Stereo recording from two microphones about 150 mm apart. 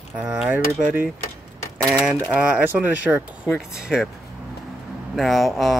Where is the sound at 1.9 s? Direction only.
5° right (ahead or behind).